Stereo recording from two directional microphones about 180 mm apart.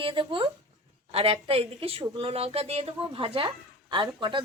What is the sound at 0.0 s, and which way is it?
Speech, 30° right (ahead or behind).